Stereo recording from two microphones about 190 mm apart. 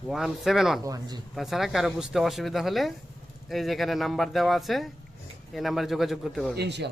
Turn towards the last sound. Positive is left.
turn(degrees=-65)  # may be behind; listen again after turning